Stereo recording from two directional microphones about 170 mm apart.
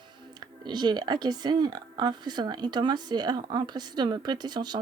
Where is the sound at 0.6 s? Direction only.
25° right (ahead or behind).